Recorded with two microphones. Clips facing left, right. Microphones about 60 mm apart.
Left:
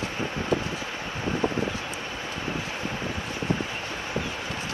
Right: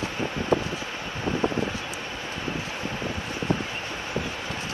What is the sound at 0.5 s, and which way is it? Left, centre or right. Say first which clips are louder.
Wind: right 3 dB; right.